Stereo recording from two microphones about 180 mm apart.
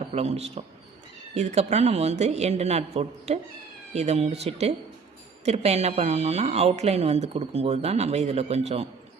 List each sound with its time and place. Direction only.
0.1 s speech: 35° right (ahead or behind)